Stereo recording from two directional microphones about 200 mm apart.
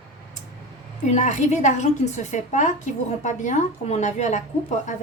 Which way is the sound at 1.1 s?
35° left (ahead or behind).